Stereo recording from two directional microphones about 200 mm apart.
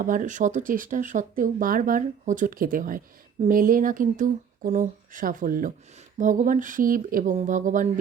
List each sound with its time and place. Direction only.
0.0 s speech: 40° right (ahead or behind)